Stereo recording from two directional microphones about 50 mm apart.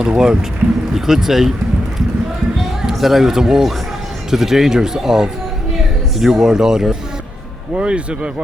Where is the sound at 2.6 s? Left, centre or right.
Centre.